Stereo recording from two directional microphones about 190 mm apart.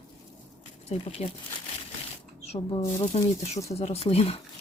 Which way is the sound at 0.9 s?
30° left (ahead or behind).